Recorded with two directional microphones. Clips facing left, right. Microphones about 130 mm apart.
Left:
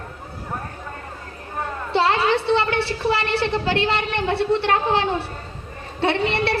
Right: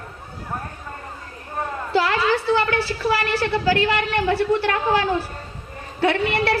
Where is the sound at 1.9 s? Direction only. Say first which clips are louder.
Left 1 dB; 25° left (ahead or behind).